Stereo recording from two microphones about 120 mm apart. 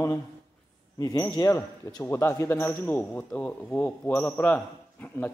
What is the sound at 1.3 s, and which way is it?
Speech, 30° left (ahead or behind).